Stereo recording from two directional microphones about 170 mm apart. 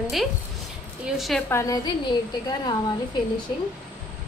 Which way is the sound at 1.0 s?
Centre (ahead or behind).